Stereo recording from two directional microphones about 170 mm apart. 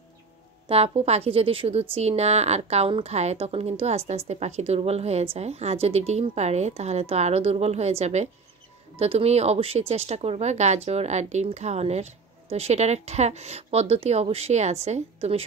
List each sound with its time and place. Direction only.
0.7 s speech: 35° right (ahead or behind)